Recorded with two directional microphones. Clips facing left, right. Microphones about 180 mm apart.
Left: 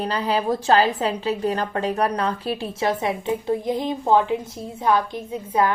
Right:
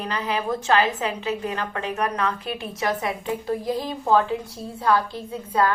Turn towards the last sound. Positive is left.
turn(degrees=20)  # may be behind; listen again after turning